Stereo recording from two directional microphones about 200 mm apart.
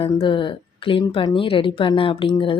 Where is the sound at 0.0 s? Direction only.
25° left (ahead or behind).